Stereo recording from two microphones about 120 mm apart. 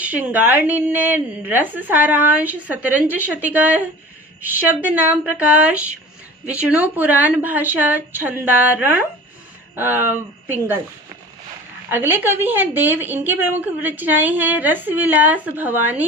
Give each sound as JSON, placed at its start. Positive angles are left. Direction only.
{"t": 0.0, "sound": "a woman's voice", "side_deg": -15}
{"t": 11.9, "sound": "a woman's voice", "side_deg": -20}